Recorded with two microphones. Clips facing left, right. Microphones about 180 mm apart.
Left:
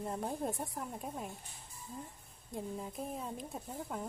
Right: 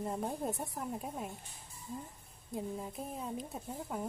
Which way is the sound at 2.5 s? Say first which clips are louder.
Right 1 dB; centre (ahead or behind).